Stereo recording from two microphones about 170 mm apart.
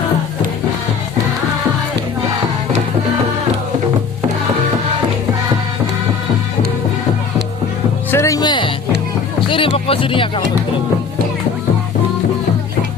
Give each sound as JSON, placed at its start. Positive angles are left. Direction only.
{"t": 8.1, "sound": "speech", "side_deg": 15}